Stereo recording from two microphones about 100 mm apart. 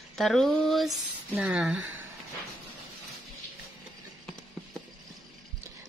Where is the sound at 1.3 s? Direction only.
10° right (ahead or behind).